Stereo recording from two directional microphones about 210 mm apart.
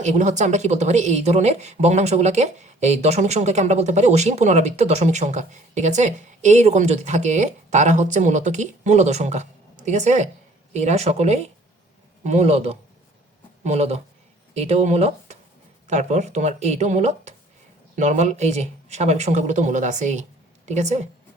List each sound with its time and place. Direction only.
0.0 s speech: 35° right (ahead or behind)